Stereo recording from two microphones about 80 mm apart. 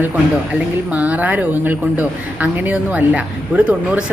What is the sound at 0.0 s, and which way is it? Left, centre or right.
Speech, centre.